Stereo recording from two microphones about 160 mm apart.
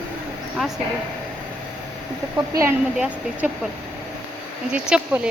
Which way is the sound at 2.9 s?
5° right (ahead or behind).